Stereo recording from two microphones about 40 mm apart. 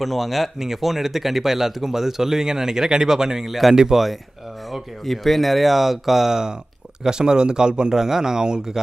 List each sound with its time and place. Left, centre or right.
0.0 s speech: centre
4.6 s speech: centre